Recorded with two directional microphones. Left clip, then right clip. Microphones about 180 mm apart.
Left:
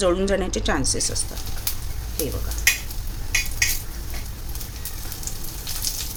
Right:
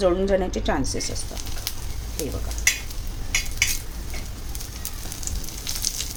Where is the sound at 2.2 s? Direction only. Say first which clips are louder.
Left 2 dB; centre (ahead or behind).